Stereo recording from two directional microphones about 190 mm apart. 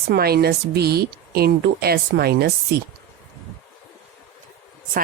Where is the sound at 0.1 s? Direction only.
55° right (ahead or behind).